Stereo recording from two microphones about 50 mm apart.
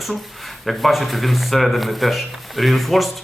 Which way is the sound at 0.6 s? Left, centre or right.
Centre.